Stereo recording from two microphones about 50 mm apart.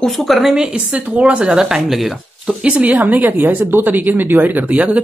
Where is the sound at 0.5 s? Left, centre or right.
Centre.